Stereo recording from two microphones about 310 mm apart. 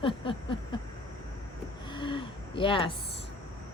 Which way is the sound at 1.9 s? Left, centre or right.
Centre.